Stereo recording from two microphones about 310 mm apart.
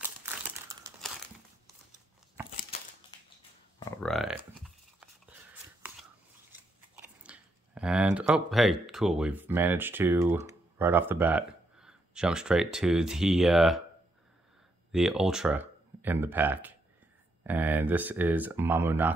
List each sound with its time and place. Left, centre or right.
0.0 s crumpling: centre
3.8 s a sound: centre
6.5 s chewing: centre
8.8 s speech: centre
14.9 s speech: centre